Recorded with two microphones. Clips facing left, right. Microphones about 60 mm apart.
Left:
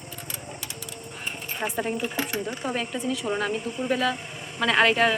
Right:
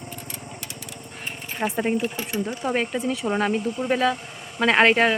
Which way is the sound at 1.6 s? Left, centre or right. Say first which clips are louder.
Right 5 dB; right.